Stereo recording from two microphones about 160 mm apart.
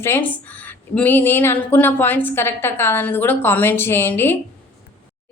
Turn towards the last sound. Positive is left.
turn(degrees=15)  # may be behind; listen again after turning